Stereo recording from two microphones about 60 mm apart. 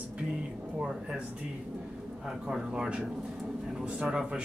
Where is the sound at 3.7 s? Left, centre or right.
Centre.